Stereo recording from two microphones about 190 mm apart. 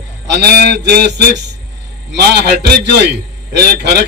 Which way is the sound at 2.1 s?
60° right (ahead or behind).